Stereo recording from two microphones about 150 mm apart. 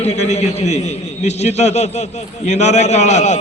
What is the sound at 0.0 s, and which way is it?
A man's voice, 45° left (ahead or behind).